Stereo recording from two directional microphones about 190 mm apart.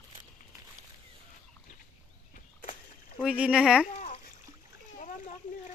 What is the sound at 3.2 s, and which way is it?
Speech, 5° right (ahead or behind).